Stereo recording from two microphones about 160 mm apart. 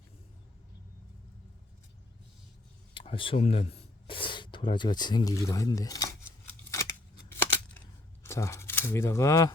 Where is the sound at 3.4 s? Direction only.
40° left (ahead or behind); by 6.0 s 20° left (ahead or behind).